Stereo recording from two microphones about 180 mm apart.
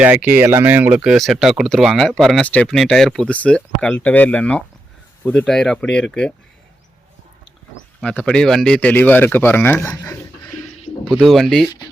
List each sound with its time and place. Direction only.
0.0 s speech: 10° right (ahead or behind)
8.0 s speech: 5° left (ahead or behind)
10.4 s a sound: 35° left (ahead or behind)
11.0 s speech: centre (ahead or behind)